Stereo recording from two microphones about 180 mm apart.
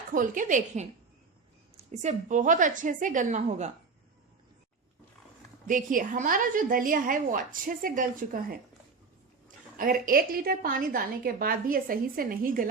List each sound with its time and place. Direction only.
0.1 s a woman's voice: 45° right (ahead or behind)
5.6 s a woman's voice: 50° right (ahead or behind)
9.7 s a woman's voice: 50° right (ahead or behind)